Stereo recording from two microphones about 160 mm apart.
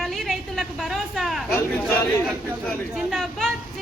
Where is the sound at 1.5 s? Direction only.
15° left (ahead or behind).